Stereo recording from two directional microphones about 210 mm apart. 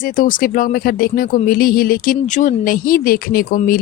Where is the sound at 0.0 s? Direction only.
40° left (ahead or behind).